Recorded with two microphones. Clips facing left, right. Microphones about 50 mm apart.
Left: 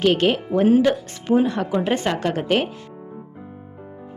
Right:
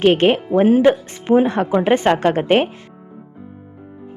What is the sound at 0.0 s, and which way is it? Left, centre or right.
A woman's voice, right.